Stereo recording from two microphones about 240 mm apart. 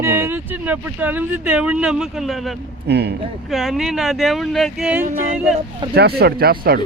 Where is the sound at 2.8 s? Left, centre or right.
Right.